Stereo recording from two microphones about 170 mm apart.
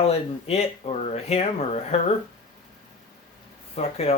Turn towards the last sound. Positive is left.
turn(degrees=35)  # may be behind; listen again after turning